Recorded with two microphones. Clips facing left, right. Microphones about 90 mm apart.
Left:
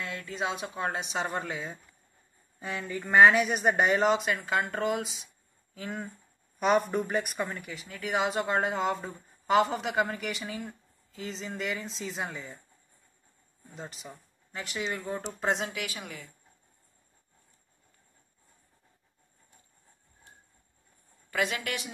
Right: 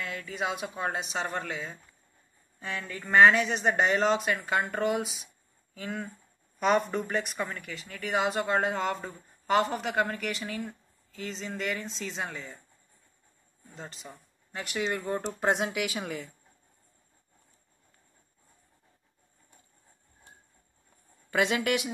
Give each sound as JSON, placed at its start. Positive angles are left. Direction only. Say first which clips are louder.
{"t": 0.5, "sound": "speech", "louder": "even", "side_deg": -5}
{"t": 1.2, "sound": "speech", "louder": "left 1 dB", "side_deg": 15}
{"t": 2.6, "sound": "speech", "louder": "left 2 dB", "side_deg": 10}
{"t": 5.8, "sound": "speech", "louder": "right 1 dB", "side_deg": 5}
{"t": 13.7, "sound": "speech", "louder": "left 1 dB", "side_deg": 5}
{"t": 16.0, "sound": "speech", "louder": "right 7 dB", "side_deg": -30}
{"t": 21.3, "sound": "speech", "louder": "right 5 dB", "side_deg": -20}